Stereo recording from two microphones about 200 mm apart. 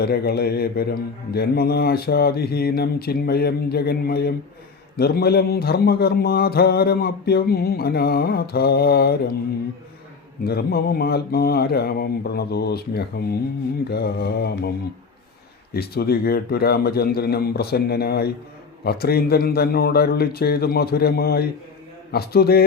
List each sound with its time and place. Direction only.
0.0 s a man's voice: 50° left (ahead or behind)
10.4 s a man's voice: 50° left (ahead or behind)
15.7 s a man's voice: 50° left (ahead or behind)